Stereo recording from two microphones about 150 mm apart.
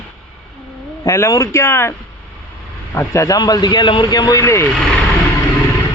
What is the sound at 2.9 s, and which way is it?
A man's voice, 20° left (ahead or behind).